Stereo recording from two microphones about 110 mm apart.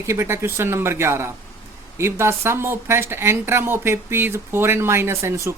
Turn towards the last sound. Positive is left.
turn(degrees=-25)  # may be behind; listen again after turning